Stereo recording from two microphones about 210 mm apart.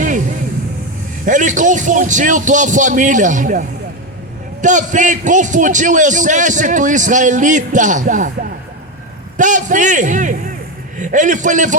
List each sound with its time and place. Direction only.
1.2 s a man's voice: 35° right (ahead or behind)
9.4 s a man's voice: 35° right (ahead or behind)